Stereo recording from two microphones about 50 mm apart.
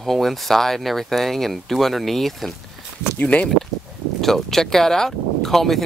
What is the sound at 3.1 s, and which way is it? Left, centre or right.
Speech, left.